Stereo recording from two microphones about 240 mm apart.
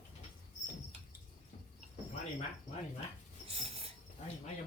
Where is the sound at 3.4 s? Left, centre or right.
Right.